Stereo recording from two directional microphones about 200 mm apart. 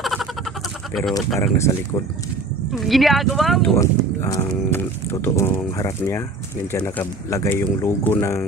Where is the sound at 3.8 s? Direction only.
15° left (ahead or behind).